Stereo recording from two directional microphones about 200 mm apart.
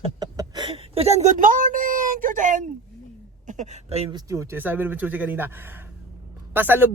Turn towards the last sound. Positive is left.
turn(degrees=-10)  # may be behind; listen again after turning